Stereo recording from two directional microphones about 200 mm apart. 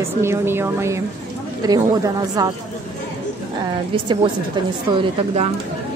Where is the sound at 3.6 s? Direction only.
25° right (ahead or behind).